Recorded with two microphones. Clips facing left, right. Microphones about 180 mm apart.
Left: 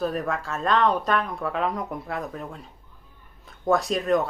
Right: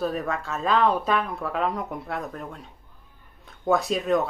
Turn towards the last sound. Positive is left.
turn(degrees=0)  # may be behind; listen again after turning